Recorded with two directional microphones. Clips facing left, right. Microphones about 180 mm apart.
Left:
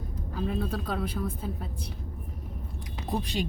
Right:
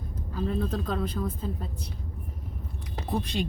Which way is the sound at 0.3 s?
10° left (ahead or behind).